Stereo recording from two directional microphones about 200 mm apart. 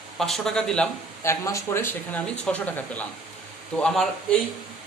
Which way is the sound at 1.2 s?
15° left (ahead or behind).